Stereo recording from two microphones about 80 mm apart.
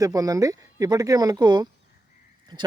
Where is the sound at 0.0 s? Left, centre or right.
Right.